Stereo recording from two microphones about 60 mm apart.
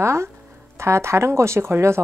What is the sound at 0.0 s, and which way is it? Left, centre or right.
A woman's voice, right.